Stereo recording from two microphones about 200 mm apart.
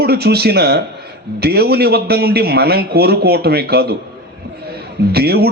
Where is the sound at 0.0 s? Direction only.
50° right (ahead or behind).